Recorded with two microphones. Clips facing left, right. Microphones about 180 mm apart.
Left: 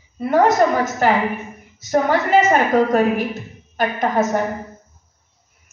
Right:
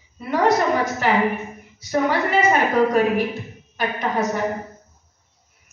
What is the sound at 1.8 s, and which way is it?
A woman's voice, 45° left (ahead or behind).